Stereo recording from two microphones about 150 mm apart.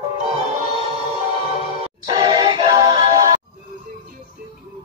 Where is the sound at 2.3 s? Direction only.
30° right (ahead or behind).